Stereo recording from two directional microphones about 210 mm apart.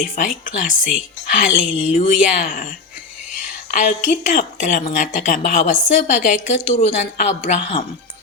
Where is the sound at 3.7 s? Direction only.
35° left (ahead or behind).